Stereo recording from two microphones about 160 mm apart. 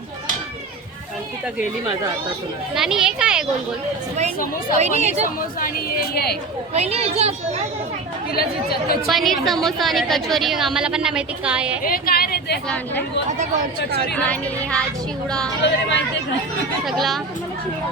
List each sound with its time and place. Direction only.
2.7 s a woman's voice: 5° right (ahead or behind)
4.8 s speech: 45° right (ahead or behind)
5.5 s speech: 65° left (ahead or behind)
6.7 s speech: 40° right (ahead or behind)
8.3 s speech: 70° left (ahead or behind)
9.0 s a woman's voice: centre (ahead or behind)
11.8 s a woman's voice: 65° left (ahead or behind)
12.6 s speech: 10° left (ahead or behind)
14.2 s a woman's voice: 5° left (ahead or behind)
15.6 s speech: 90° left
16.8 s a woman's voice: centre (ahead or behind)